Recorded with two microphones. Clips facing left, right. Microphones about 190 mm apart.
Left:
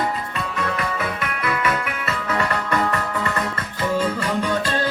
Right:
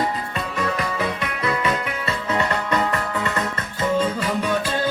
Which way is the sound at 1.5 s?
25° right (ahead or behind).